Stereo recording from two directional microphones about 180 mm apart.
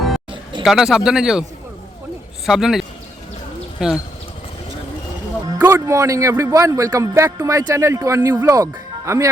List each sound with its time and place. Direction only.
0.6 s a man's voice: centre (ahead or behind)
2.5 s a man's voice: centre (ahead or behind)
5.6 s speech: 15° right (ahead or behind)